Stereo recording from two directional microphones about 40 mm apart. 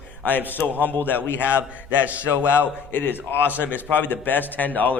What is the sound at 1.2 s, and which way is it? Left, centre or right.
Speech, left.